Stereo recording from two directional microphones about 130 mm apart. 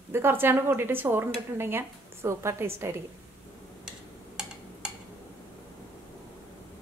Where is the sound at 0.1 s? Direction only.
15° right (ahead or behind).